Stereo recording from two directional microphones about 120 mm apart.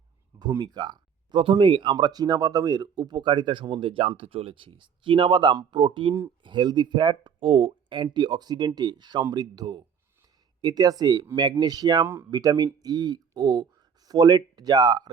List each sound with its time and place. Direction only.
0.6 s speech: 35° right (ahead or behind)
12.0 s speech: 20° right (ahead or behind)
12.3 s speech: 35° right (ahead or behind)